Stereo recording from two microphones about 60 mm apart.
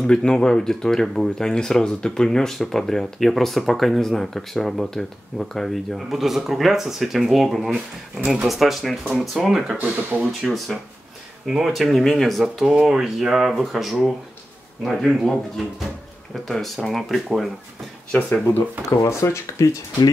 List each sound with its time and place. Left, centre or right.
0.0 s speech: centre
9.8 s speech: right
10.4 s speech: centre
12.8 s speech: centre
18.9 s speech: left